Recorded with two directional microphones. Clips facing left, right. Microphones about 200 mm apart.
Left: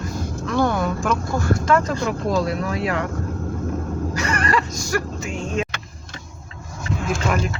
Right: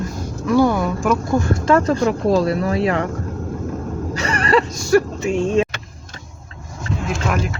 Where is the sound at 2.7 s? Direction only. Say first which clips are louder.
Right 5 dB; 25° right (ahead or behind).